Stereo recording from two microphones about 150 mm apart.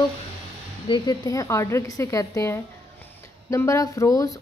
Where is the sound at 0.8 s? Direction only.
30° left (ahead or behind).